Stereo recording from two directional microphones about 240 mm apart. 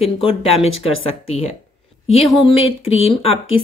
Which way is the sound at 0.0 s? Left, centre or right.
Left.